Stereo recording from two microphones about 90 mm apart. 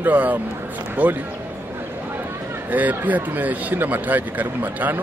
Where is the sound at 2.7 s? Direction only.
20° right (ahead or behind).